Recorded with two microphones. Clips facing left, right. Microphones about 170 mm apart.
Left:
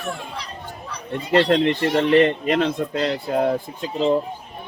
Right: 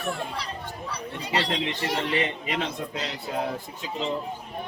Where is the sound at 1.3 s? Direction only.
50° left (ahead or behind).